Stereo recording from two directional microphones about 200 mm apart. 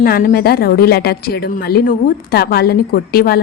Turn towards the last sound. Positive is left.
turn(degrees=50)  # may be behind; listen again after turning